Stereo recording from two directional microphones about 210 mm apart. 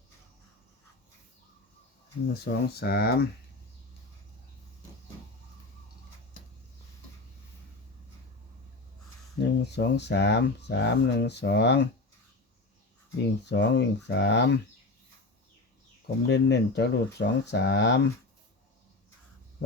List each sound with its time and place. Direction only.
2.3 s speech: 50° left (ahead or behind)
9.4 s speech: 55° left (ahead or behind)
13.5 s speech: 55° left (ahead or behind)
16.2 s speech: 55° left (ahead or behind)